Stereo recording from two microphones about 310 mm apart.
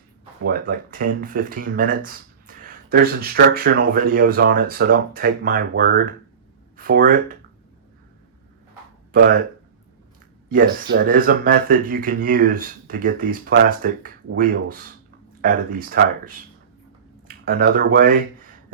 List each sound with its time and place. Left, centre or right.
0.4 s speech: right
10.5 s speech: right